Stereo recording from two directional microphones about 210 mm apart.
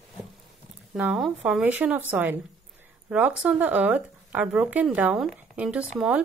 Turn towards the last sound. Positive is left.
turn(degrees=-5)  # may be behind; listen again after turning